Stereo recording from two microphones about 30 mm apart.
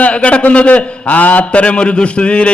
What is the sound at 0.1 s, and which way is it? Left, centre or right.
A man's voice, left.